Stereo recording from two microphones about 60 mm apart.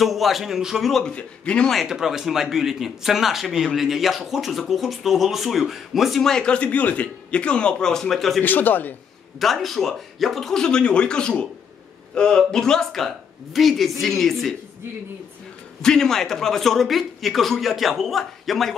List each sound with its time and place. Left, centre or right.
0.0 s speech: centre
1.1 s a man's voice: centre
1.7 s speech: centre
6.4 s a man's voice: left; by 8.4 s centre
8.4 s a man's voice: left
9.4 s speech: centre
15.8 s speech: centre